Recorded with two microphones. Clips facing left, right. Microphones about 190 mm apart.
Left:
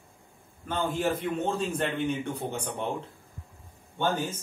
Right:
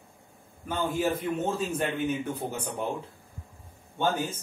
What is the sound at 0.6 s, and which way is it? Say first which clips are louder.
A man's voice: even; 10° right (ahead or behind).